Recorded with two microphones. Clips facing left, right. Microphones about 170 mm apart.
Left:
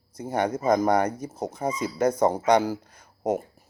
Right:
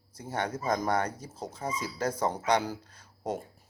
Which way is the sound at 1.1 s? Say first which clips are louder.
Left 8 dB; 60° left (ahead or behind).